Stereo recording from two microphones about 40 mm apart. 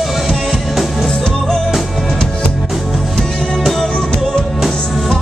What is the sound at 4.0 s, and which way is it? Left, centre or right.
Music, centre.